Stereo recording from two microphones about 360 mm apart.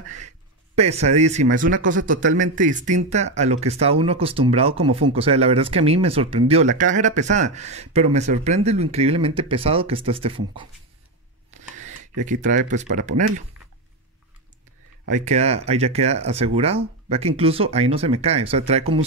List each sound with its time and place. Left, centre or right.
0.7 s speech: centre
11.5 s a sound: centre
15.0 s speech: centre